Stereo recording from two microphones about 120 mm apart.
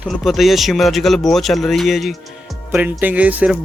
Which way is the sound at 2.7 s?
15° right (ahead or behind).